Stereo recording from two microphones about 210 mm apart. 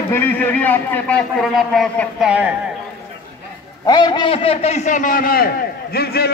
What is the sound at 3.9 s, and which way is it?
A man's voice, 20° left (ahead or behind).